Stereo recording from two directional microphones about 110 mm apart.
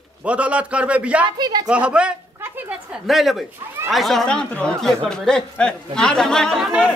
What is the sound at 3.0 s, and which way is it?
A man's voice, centre (ahead or behind).